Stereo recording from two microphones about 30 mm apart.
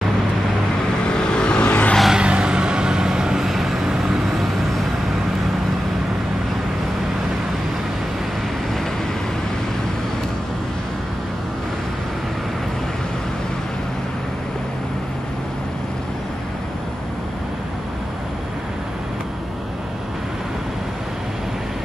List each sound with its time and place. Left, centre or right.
1.0 s vehicle: left
1.6 s vehicle: left
2.1 s vehicle: right
3.4 s vehicle: centre
3.7 s vehicle: right